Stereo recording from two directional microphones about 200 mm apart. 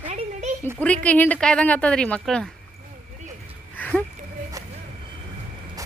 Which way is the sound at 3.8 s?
10° left (ahead or behind).